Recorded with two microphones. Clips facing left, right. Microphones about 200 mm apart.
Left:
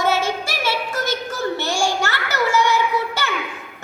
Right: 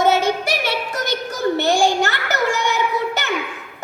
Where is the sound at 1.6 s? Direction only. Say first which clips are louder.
Right 7 dB; 20° right (ahead or behind).